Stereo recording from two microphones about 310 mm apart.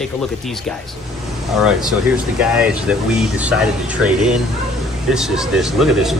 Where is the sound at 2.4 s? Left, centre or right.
Centre.